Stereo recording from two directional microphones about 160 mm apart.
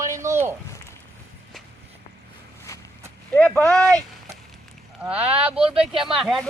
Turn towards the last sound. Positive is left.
turn(degrees=0)  # may be behind; listen again after turning